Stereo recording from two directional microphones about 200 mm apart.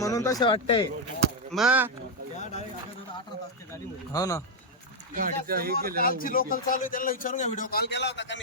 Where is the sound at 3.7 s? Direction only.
15° left (ahead or behind).